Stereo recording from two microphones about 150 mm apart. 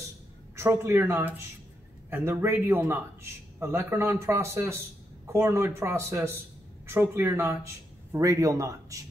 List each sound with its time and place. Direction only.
0.6 s a man's voice: 15° right (ahead or behind)